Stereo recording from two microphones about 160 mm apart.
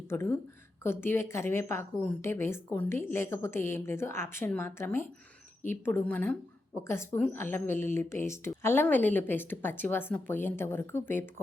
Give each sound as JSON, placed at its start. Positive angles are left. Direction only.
{"t": 0.1, "sound": "speech", "side_deg": 15}